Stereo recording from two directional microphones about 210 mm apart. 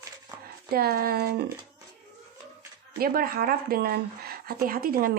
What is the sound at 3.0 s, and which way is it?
Speech, 45° right (ahead or behind).